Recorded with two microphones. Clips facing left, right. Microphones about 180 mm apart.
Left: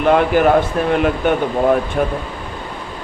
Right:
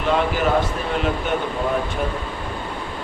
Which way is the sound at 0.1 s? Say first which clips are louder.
Left 6 dB; 60° left (ahead or behind).